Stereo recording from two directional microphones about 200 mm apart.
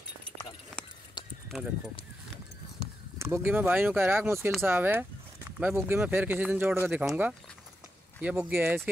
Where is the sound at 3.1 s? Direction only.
15° right (ahead or behind).